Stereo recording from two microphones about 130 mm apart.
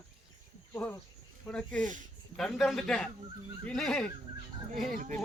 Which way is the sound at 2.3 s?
Centre (ahead or behind).